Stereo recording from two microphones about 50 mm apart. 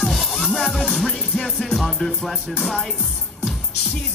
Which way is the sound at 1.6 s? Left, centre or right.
Centre.